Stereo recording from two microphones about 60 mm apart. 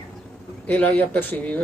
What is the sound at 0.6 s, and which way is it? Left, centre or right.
Speech, left.